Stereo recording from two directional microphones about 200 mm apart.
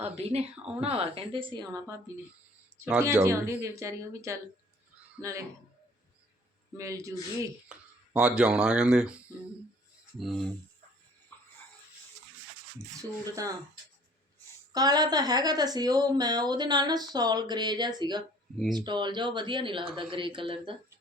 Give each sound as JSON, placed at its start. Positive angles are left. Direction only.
{"t": 0.0, "sound": "speech", "side_deg": -30}
{"t": 2.8, "sound": "a woman's voice", "side_deg": -10}
{"t": 6.7, "sound": "a woman's voice", "side_deg": -15}
{"t": 11.3, "sound": "a sound", "side_deg": 10}
{"t": 13.0, "sound": "a woman's voice", "side_deg": -15}
{"t": 14.7, "sound": "speech", "side_deg": -20}